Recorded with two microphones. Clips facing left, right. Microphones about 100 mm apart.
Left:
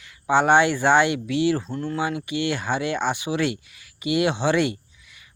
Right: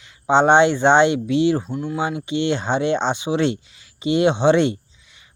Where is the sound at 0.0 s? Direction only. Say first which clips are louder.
Right 4 dB; 25° right (ahead or behind).